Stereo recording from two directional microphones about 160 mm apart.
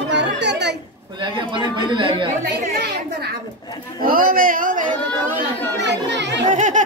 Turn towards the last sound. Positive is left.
turn(degrees=-50)  # may be behind; listen again after turning